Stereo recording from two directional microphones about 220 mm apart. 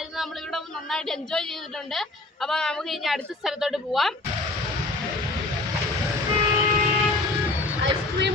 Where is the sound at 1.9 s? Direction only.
Centre (ahead or behind).